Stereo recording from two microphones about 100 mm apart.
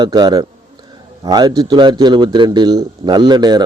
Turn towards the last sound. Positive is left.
turn(degrees=-45)  # may be behind; listen again after turning